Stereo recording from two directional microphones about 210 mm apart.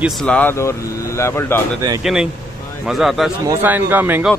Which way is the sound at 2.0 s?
Centre (ahead or behind).